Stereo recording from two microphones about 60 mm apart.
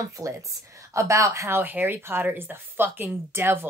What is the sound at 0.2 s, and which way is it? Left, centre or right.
Speech, right.